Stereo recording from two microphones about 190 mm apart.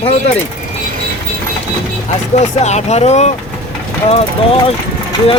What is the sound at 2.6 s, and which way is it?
Speech, 35° left (ahead or behind).